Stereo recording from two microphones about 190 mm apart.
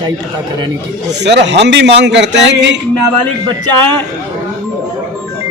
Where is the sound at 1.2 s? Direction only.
65° right (ahead or behind).